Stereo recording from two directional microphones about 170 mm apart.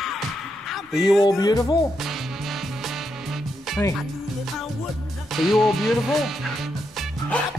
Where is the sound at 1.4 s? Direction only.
25° left (ahead or behind).